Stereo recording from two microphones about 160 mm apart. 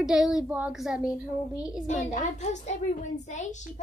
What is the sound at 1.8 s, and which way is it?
A child's voice, 50° left (ahead or behind).